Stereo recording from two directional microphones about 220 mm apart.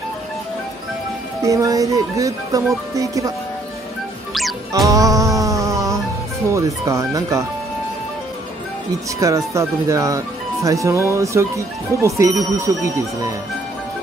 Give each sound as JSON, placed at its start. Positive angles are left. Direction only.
{"t": 1.4, "sound": "speech", "side_deg": -15}
{"t": 4.3, "sound": "music", "side_deg": 0}
{"t": 4.8, "sound": "music", "side_deg": -15}
{"t": 6.5, "sound": "speech", "side_deg": -15}
{"t": 9.2, "sound": "speech", "side_deg": -15}